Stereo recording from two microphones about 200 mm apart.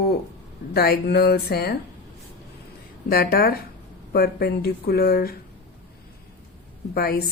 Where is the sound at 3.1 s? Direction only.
50° left (ahead or behind).